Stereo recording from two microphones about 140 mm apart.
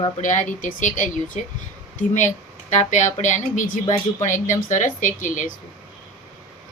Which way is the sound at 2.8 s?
60° left (ahead or behind).